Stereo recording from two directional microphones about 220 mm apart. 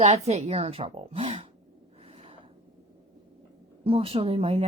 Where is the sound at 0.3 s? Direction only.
30° right (ahead or behind).